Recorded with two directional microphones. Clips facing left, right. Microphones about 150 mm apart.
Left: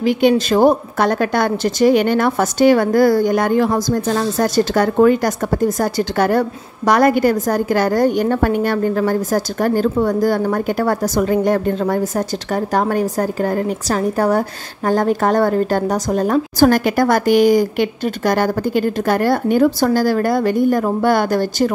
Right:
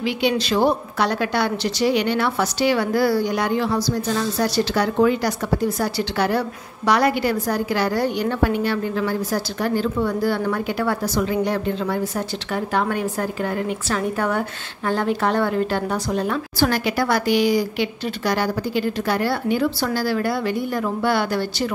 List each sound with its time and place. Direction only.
0.0 s a woman's voice: 45° left (ahead or behind)